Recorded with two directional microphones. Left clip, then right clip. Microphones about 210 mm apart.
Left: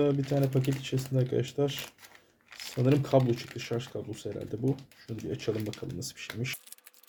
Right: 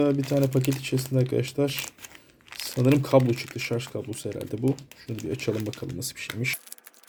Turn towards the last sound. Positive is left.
turn(degrees=-35)  # may be behind; listen again after turning